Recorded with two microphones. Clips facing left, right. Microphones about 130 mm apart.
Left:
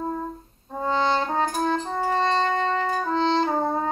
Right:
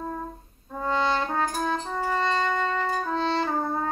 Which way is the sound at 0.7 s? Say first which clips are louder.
Left 2 dB; 25° left (ahead or behind).